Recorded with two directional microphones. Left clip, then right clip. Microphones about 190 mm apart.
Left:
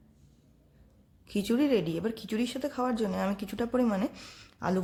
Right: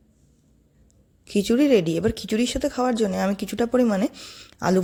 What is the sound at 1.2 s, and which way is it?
Speech, 30° right (ahead or behind).